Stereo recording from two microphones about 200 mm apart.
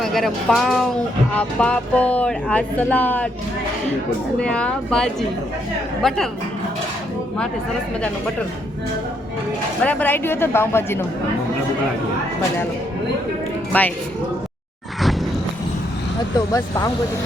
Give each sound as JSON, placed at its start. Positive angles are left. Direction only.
{"t": 0.0, "sound": "speech", "side_deg": 0}
{"t": 4.4, "sound": "speech", "side_deg": 5}
{"t": 9.8, "sound": "speech", "side_deg": 10}
{"t": 13.7, "sound": "speech", "side_deg": 10}
{"t": 16.5, "sound": "speech", "side_deg": 20}